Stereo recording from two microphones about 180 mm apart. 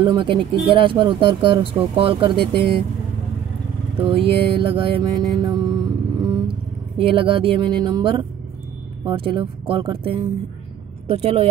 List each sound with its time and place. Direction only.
0.0 s speech: 25° right (ahead or behind)
4.0 s music: 30° right (ahead or behind)
7.0 s speech: 30° right (ahead or behind)